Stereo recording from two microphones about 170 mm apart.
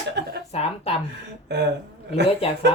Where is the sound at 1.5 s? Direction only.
80° right.